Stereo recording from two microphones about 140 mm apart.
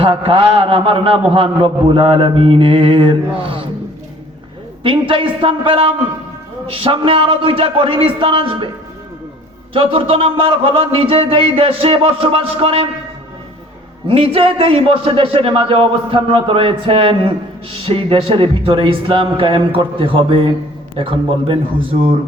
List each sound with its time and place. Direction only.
0.0 s a man's voice: 40° right (ahead or behind)
4.8 s a man's voice: 40° right (ahead or behind)
9.7 s a man's voice: 40° right (ahead or behind)
14.1 s a man's voice: 40° right (ahead or behind)